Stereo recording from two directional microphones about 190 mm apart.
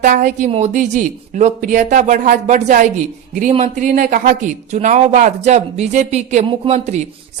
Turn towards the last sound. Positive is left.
turn(degrees=-35)  # may be behind; listen again after turning